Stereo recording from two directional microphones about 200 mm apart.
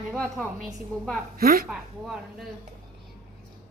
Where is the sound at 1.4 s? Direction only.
50° right (ahead or behind).